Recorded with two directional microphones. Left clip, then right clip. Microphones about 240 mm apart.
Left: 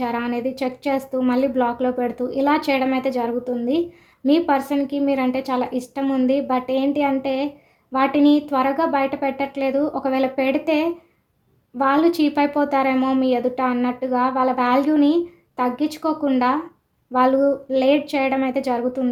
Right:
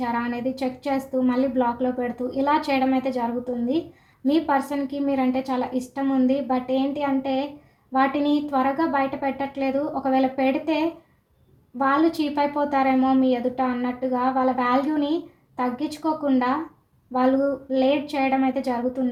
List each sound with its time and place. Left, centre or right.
0.0 s a woman's voice: left